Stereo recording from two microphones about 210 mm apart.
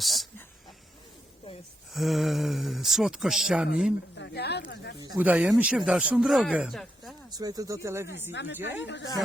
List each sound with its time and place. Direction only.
0.0 s a sound: centre (ahead or behind)
1.9 s speech: centre (ahead or behind)
4.2 s speech: 50° left (ahead or behind)
5.1 s speech: 5° right (ahead or behind)
7.3 s speech: 15° right (ahead or behind)
8.3 s a woman's voice: 60° left (ahead or behind)
8.5 s speech: 10° right (ahead or behind)